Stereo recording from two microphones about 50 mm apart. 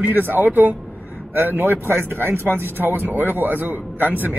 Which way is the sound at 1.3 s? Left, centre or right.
Right.